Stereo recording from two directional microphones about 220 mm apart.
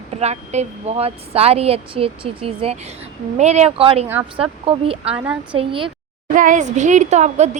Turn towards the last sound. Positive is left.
turn(degrees=-30)  # may be behind; listen again after turning